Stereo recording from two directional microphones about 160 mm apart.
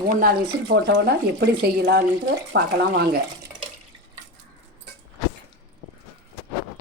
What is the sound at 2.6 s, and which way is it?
Speech, 90° right.